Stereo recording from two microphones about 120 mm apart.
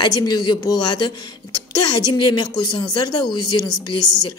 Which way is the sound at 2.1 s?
35° left (ahead or behind).